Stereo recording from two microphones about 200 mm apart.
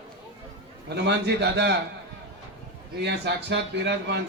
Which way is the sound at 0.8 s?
55° right (ahead or behind).